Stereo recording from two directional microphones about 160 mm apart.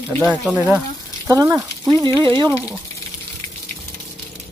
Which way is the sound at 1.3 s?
20° right (ahead or behind).